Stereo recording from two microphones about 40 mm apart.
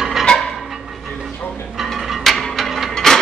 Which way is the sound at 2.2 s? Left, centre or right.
Centre.